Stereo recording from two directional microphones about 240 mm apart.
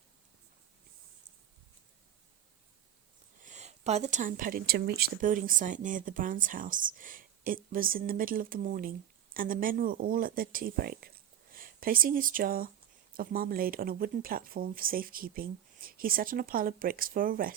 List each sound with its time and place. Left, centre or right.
3.4 s speech: right